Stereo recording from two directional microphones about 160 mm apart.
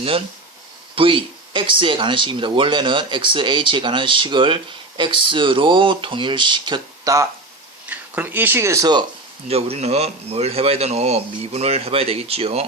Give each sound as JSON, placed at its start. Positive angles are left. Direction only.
{"t": 0.9, "sound": "speech", "side_deg": -35}
{"t": 7.9, "sound": "speech", "side_deg": -10}
{"t": 9.5, "sound": "speech", "side_deg": -40}